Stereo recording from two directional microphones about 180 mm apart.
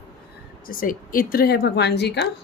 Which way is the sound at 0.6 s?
50° left (ahead or behind).